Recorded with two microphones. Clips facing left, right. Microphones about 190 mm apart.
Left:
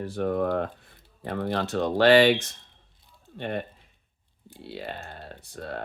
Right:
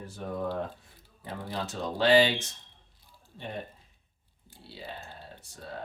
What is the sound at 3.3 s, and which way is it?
Speech, 70° left (ahead or behind).